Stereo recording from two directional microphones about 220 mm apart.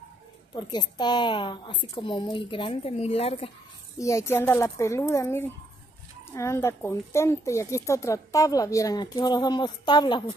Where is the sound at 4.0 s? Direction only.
15° left (ahead or behind).